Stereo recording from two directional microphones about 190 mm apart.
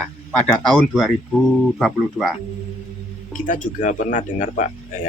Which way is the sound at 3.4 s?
45° left (ahead or behind).